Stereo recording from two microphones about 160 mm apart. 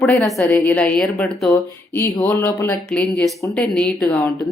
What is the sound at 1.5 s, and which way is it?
Speech, 20° left (ahead or behind).